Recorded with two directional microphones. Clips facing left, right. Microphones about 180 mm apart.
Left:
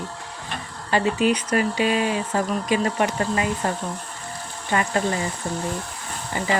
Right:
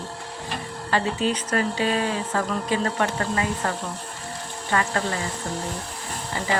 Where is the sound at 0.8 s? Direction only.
15° left (ahead or behind).